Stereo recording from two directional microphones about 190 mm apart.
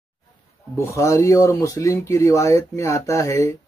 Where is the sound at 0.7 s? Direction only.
15° left (ahead or behind).